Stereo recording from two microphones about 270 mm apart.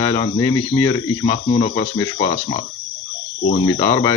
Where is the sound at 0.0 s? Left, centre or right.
Centre.